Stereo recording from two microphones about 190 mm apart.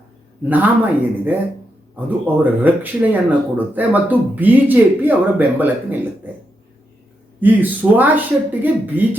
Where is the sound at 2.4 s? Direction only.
10° right (ahead or behind).